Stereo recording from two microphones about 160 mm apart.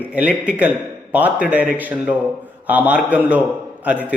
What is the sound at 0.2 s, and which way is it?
Speech, 10° right (ahead or behind).